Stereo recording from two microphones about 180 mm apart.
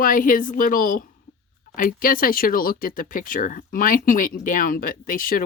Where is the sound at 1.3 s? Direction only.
90° left.